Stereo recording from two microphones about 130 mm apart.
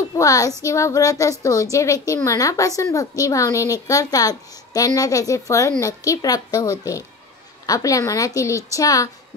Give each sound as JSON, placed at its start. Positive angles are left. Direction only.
{"t": 0.1, "sound": "a woman's voice", "side_deg": 25}